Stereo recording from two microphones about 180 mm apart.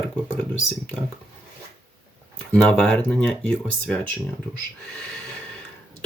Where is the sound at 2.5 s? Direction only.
5° left (ahead or behind).